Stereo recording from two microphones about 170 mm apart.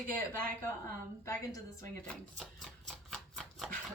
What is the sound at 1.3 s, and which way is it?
Speech, 15° left (ahead or behind).